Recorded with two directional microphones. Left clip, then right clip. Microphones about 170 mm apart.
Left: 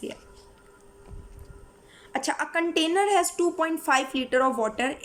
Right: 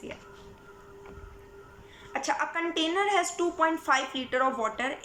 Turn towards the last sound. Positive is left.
turn(degrees=55)  # may be behind; listen again after turning